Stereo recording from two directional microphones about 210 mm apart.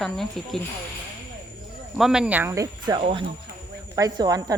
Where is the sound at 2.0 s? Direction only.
5° right (ahead or behind).